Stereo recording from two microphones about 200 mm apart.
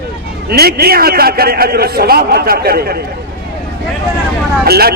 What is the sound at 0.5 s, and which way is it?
A man's voice, 50° right (ahead or behind).